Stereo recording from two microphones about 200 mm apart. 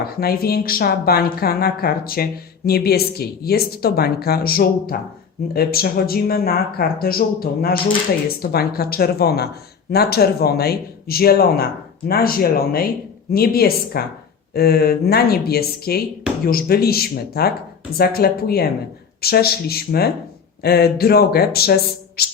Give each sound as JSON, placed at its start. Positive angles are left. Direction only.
{"t": 0.0, "sound": "speech", "side_deg": 50}